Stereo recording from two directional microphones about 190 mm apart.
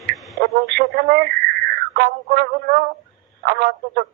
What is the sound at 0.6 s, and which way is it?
A man's voice, 55° right (ahead or behind).